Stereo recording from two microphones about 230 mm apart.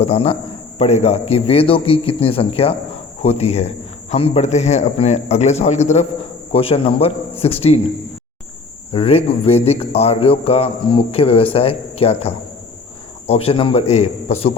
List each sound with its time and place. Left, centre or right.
0.0 s a man's voice: left